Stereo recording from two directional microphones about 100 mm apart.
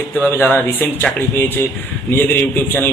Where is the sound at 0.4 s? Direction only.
20° left (ahead or behind).